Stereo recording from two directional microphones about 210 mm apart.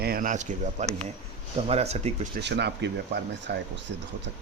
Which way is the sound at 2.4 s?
55° right (ahead or behind).